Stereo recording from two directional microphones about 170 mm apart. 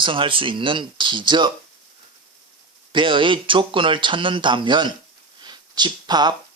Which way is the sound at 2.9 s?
30° right (ahead or behind).